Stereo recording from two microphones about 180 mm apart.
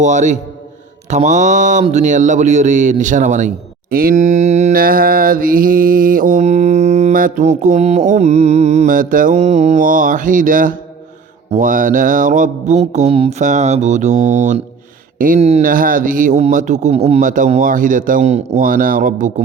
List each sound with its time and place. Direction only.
0.0 s speech: 40° right (ahead or behind)
11.5 s mantra: 45° right (ahead or behind)
15.4 s speech: 35° right (ahead or behind)